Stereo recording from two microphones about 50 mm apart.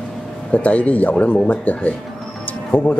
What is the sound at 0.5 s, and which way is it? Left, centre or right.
Speech, left.